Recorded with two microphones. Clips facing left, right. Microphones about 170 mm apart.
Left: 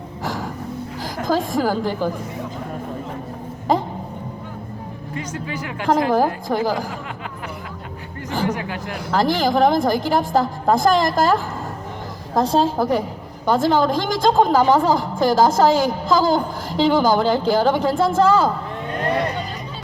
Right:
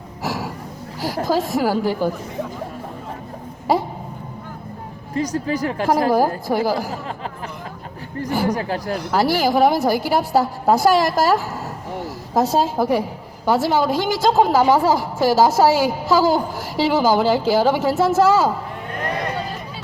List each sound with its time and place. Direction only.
0.3 s gasp: 10° right (ahead or behind)
1.0 s a woman's voice: 10° right (ahead or behind)
3.7 s a woman's voice: 10° right (ahead or behind)
5.1 s a woman's voice: 35° right (ahead or behind)
6.5 s a woman's voice: 10° right (ahead or behind)
8.4 s a woman's voice: 35° right (ahead or behind)
9.1 s a woman's voice: 10° right (ahead or behind)